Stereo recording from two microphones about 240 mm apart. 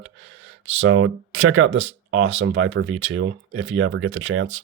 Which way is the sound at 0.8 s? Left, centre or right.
Right.